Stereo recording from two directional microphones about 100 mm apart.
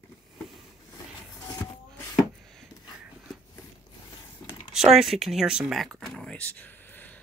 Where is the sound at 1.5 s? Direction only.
40° left (ahead or behind).